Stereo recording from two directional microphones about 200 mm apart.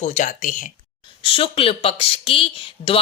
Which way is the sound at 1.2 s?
25° left (ahead or behind).